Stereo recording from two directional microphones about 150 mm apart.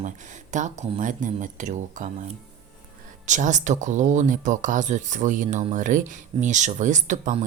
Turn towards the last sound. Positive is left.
turn(degrees=-55)  # may be behind; listen again after turning